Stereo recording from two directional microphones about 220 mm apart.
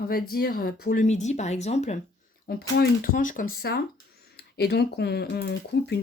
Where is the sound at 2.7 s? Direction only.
45° left (ahead or behind).